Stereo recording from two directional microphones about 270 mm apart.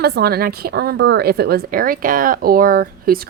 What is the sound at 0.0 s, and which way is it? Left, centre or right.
A woman's voice, right.